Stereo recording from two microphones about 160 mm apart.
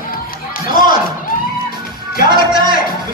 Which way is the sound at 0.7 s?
60° left (ahead or behind).